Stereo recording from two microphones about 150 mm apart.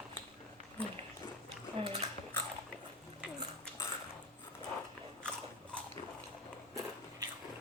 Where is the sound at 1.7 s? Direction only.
45° right (ahead or behind).